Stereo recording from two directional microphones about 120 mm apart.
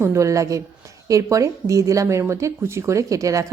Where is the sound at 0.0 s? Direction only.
25° right (ahead or behind).